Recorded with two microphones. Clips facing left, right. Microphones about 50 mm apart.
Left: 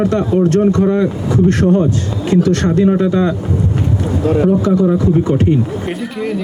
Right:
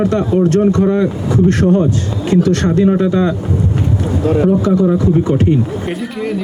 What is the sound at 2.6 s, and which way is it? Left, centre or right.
Speech, right.